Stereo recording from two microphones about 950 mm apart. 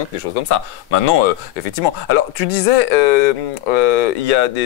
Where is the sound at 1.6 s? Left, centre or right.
Left.